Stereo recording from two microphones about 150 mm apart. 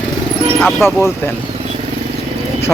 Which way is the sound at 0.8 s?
15° left (ahead or behind).